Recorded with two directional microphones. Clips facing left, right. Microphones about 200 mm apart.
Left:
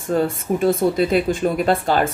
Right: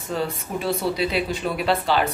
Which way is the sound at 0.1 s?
50° left (ahead or behind).